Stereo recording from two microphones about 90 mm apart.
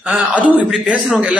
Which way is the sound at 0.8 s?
15° right (ahead or behind).